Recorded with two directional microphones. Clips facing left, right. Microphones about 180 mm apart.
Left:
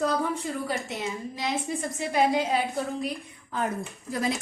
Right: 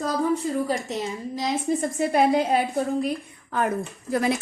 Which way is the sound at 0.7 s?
40° right (ahead or behind).